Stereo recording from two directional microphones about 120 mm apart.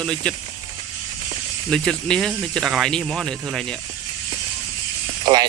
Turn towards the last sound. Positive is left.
turn(degrees=-35)  # may be behind; listen again after turning